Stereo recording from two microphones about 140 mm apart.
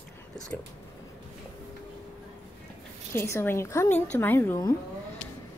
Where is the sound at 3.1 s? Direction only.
20° left (ahead or behind).